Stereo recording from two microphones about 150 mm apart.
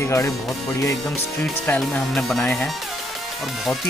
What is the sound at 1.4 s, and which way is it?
Cutlery, 5° left (ahead or behind).